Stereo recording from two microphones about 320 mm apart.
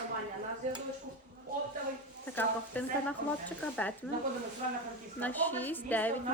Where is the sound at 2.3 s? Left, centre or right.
Centre.